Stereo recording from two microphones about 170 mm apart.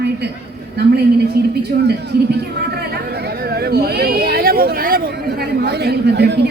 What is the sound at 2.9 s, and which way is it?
Chatter, 70° right (ahead or behind).